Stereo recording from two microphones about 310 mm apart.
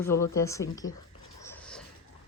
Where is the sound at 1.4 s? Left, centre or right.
Centre.